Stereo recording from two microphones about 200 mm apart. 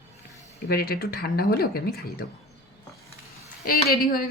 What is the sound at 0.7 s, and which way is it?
A woman's voice, 50° left (ahead or behind).